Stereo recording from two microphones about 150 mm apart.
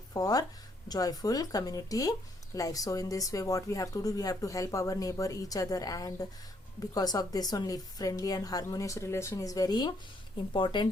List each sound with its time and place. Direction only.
0.1 s speech: 25° left (ahead or behind)